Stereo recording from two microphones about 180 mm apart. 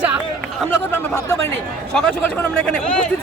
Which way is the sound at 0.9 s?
15° left (ahead or behind).